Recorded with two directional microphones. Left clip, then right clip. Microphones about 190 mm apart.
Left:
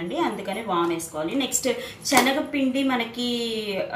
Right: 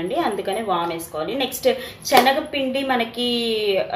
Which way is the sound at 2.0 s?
40° right (ahead or behind).